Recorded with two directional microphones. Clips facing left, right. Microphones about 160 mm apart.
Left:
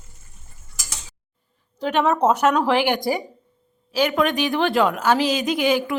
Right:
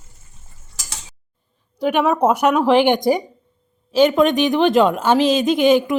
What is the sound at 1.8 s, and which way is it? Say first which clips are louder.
A woman's voice: right 3 dB; 10° right (ahead or behind).